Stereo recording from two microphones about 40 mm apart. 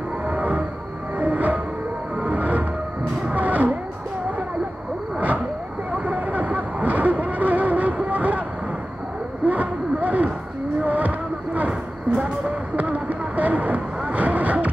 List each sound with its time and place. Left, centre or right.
0.3 s music: right
3.3 s vehicle: right
6.0 s vehicle: right
9.5 s a sound: right
10.8 s vehicle: right